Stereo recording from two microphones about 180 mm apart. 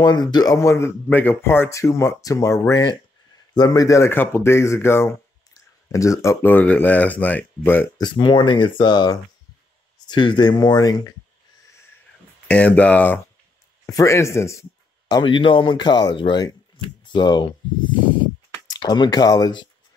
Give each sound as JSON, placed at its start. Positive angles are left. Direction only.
{"t": 0.0, "sound": "speech", "side_deg": 25}
{"t": 8.0, "sound": "speech", "side_deg": 25}
{"t": 12.4, "sound": "speech", "side_deg": 5}
{"t": 17.0, "sound": "a sound", "side_deg": 25}